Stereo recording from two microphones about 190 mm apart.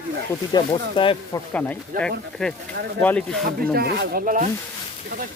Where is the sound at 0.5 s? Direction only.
25° left (ahead or behind).